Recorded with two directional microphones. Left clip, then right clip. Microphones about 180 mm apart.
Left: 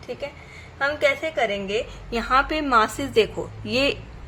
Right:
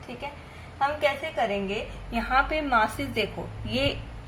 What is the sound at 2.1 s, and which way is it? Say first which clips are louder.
A woman's voice: left 4 dB; 50° left (ahead or behind).